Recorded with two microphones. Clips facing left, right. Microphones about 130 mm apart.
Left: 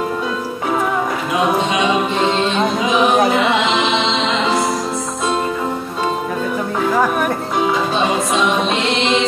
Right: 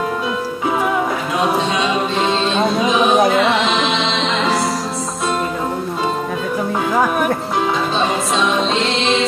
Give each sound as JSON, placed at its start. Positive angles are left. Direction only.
{"t": 1.4, "sound": "music", "side_deg": 20}
{"t": 2.8, "sound": "a sound", "side_deg": -20}
{"t": 3.5, "sound": "music", "side_deg": 20}